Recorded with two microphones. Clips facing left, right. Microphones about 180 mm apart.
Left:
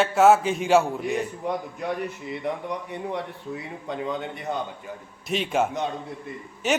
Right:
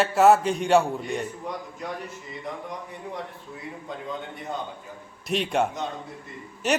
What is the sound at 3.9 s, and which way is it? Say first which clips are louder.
Speech: left 7 dB; 70° left (ahead or behind).